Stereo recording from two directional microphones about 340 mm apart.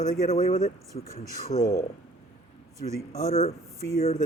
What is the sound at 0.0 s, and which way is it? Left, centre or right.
Speech, centre.